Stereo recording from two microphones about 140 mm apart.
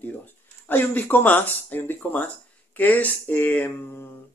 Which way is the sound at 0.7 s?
15° left (ahead or behind).